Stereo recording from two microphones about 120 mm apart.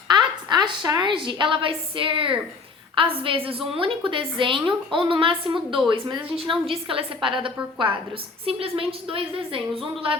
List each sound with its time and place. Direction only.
0.1 s a woman's voice: 35° right (ahead or behind)